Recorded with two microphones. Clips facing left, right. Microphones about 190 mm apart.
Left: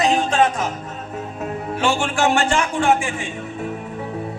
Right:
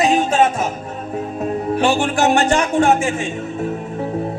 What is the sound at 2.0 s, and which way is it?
A man's voice, 35° right (ahead or behind).